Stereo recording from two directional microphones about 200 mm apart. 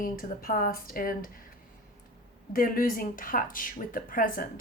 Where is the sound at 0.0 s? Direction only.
45° left (ahead or behind).